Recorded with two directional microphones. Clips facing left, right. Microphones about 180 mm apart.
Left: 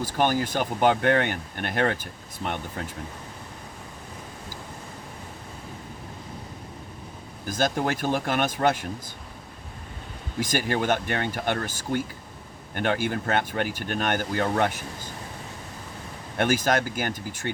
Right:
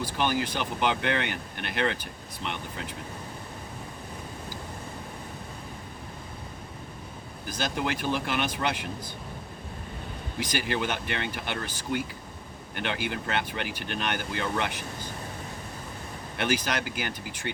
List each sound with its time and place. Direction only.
0.0 s speech: 45° left (ahead or behind)
7.4 s speech: 45° left (ahead or behind)
10.4 s speech: 45° left (ahead or behind)
16.4 s speech: 45° left (ahead or behind)